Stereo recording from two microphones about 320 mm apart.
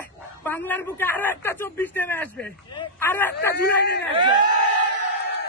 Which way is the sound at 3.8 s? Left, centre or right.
Left.